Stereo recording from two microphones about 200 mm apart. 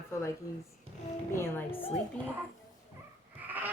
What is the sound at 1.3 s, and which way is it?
Speech, 10° left (ahead or behind).